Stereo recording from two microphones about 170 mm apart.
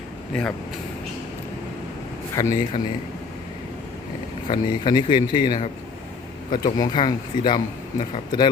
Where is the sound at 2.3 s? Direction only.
20° left (ahead or behind).